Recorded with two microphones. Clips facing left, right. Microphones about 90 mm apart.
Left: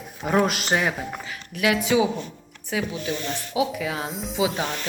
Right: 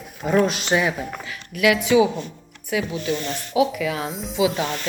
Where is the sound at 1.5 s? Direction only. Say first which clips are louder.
Right 4 dB; 35° left (ahead or behind).